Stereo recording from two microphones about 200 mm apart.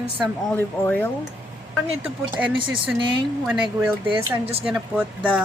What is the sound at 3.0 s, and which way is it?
Speech, 25° right (ahead or behind).